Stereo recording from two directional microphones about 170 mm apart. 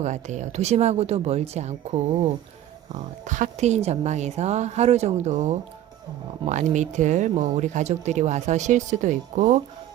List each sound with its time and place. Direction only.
0.0 s a woman's voice: 45° right (ahead or behind)
3.2 s a woman's voice: 45° right (ahead or behind)